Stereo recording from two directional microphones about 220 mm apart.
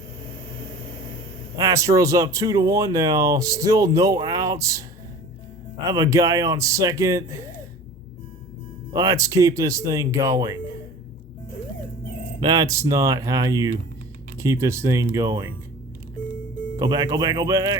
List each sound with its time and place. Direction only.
1.5 s speech: 15° right (ahead or behind)
8.9 s speech: 15° right (ahead or behind)
12.4 s speech: 15° right (ahead or behind)
16.7 s speech: 15° right (ahead or behind)